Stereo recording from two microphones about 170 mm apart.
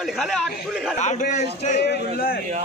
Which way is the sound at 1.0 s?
45° left (ahead or behind).